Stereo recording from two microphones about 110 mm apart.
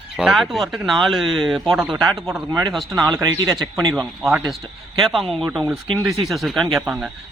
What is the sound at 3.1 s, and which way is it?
Speech, 35° right (ahead or behind).